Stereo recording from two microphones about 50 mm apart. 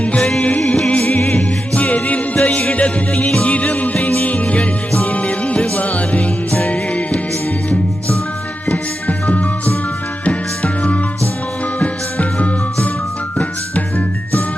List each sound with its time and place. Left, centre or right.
0.2 s music: centre
1.3 s music: left
8.6 s music: left